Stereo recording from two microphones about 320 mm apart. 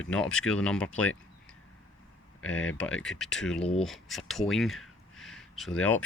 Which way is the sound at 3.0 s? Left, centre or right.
Centre.